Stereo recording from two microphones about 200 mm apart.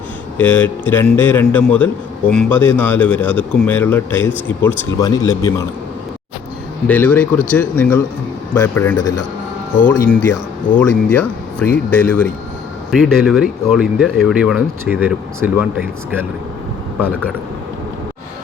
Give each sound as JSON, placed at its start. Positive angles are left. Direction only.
{"t": 0.3, "sound": "speech", "side_deg": 10}
{"t": 6.8, "sound": "speech", "side_deg": 5}